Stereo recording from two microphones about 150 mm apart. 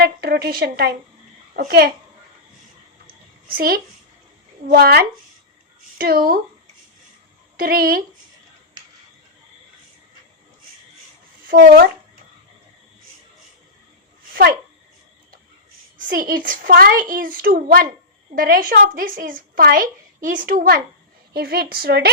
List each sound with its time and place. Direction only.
0.0 s a sound: 90° right
1.5 s a woman's voice: 90° right
4.7 s a woman's voice: 90° right
6.0 s a woman's voice: 75° right (ahead or behind)
7.5 s speech: 85° right
11.5 s a woman's voice: 90° right
16.0 s a woman's voice: 70° right (ahead or behind)
21.3 s a woman's voice: 90° right